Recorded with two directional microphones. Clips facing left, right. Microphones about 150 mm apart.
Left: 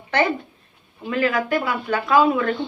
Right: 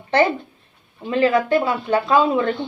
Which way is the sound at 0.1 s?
30° right (ahead or behind).